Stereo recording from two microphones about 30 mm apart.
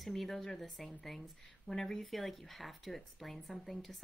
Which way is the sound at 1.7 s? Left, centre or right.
Centre.